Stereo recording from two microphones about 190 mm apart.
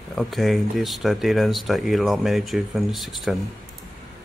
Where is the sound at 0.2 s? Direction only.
Centre (ahead or behind).